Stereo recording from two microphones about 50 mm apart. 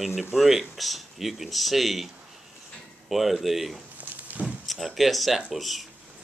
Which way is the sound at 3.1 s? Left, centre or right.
Centre.